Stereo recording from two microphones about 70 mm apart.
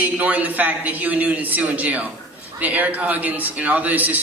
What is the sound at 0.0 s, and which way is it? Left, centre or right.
A man's voice, right.